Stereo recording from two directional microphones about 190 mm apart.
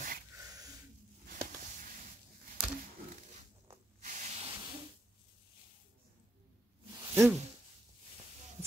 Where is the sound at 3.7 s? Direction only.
40° right (ahead or behind).